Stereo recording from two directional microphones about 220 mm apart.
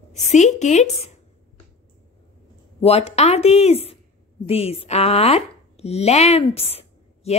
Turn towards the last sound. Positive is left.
turn(degrees=25)  # may be behind; listen again after turning